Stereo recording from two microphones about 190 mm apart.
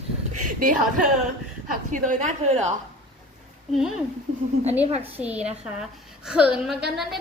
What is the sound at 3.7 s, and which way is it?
Speech, centre (ahead or behind).